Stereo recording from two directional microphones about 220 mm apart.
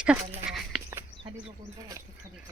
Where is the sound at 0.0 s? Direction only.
5° right (ahead or behind).